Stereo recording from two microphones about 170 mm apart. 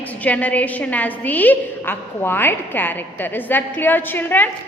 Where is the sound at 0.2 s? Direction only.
10° left (ahead or behind).